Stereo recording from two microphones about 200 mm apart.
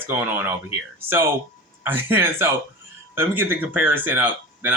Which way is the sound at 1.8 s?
10° right (ahead or behind).